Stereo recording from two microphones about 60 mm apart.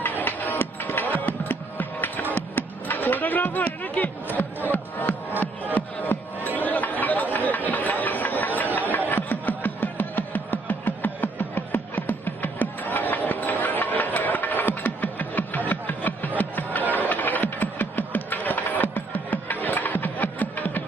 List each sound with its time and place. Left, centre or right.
0.2 s music: left
5.7 s chatter: left
9.0 s a sound: left